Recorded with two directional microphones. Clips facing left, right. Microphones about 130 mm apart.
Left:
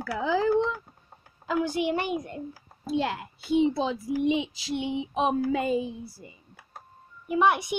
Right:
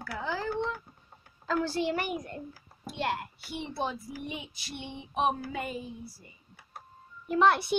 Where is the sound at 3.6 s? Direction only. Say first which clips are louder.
Left 7 dB; 90° left.